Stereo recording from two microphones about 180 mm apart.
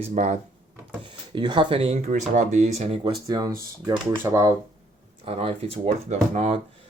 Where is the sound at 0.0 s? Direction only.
40° right (ahead or behind).